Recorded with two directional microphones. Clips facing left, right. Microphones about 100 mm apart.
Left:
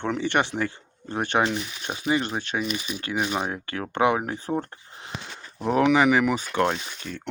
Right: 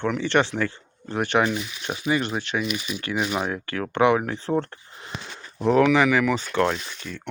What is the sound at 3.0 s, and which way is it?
Speech, 25° left (ahead or behind).